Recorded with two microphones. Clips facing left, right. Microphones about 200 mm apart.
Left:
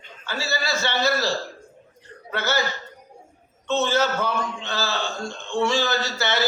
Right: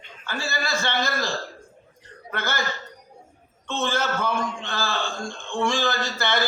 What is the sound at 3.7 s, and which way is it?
A man's voice, 50° right (ahead or behind).